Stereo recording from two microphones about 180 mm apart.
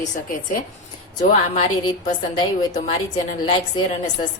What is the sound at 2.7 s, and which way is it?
Speech, 40° left (ahead or behind).